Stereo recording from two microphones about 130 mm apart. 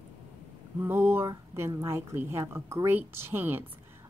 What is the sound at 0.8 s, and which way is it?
Speech, 15° right (ahead or behind).